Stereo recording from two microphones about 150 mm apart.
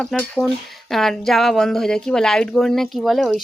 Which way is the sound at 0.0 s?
5° left (ahead or behind).